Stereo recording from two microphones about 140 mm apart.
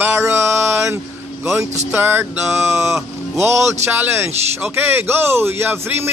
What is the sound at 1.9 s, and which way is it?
Speech, 15° right (ahead or behind).